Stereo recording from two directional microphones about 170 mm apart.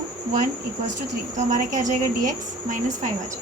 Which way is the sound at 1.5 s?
50° right (ahead or behind).